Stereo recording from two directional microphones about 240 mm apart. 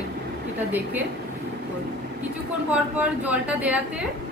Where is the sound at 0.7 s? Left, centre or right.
Centre.